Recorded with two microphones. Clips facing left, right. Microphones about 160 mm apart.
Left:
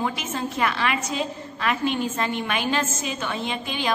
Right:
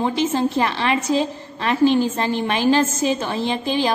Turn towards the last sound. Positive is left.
turn(degrees=-35)  # may be behind; listen again after turning